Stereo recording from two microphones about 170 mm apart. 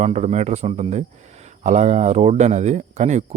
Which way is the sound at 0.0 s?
40° right (ahead or behind).